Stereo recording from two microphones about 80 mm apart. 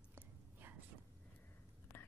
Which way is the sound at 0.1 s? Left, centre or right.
Right.